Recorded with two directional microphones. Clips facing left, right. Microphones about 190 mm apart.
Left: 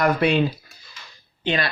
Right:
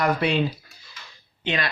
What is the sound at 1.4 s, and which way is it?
Speech, 35° left (ahead or behind).